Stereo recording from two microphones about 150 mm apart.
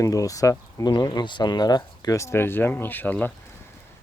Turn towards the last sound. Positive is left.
turn(degrees=10)  # may be behind; listen again after turning